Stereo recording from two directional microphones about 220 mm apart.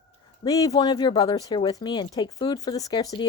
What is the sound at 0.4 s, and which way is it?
A woman's voice, 15° left (ahead or behind).